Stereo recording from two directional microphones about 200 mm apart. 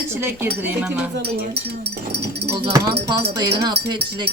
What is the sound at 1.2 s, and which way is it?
Speech, 55° right (ahead or behind).